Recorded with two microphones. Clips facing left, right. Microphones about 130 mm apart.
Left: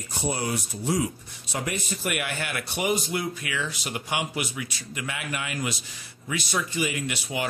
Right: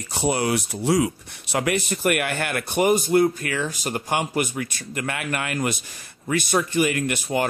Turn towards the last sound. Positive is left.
turn(degrees=-50)  # may be behind; listen again after turning